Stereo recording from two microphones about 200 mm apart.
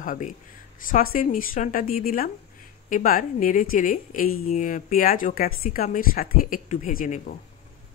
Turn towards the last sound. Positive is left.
turn(degrees=40)  # may be behind; listen again after turning